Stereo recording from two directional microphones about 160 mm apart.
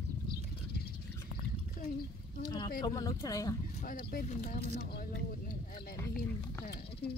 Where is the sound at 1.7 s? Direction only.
65° left (ahead or behind).